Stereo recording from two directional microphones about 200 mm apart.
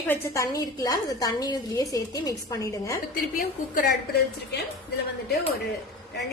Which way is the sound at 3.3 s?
45° left (ahead or behind).